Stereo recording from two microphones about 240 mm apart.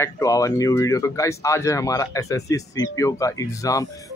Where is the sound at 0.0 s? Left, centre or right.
Centre.